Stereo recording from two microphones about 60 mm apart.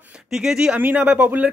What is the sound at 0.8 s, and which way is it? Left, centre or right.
Speech, right.